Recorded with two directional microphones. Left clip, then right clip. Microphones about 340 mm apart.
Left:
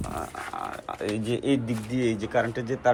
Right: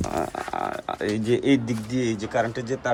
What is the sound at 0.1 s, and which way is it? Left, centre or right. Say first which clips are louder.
Speech: right 5 dB; centre.